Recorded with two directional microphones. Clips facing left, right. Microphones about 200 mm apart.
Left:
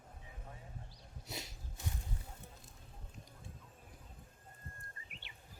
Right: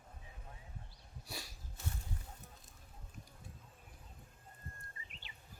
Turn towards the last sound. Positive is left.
turn(degrees=60)  # may be behind; listen again after turning